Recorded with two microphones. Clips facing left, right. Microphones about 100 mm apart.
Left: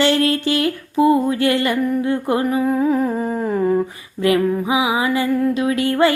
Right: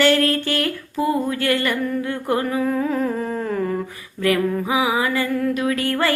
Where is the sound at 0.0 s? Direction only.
20° left (ahead or behind).